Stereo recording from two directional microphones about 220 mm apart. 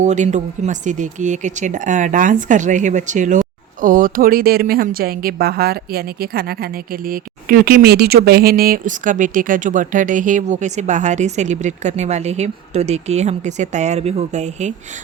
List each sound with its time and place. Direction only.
0.0 s speech: 35° right (ahead or behind)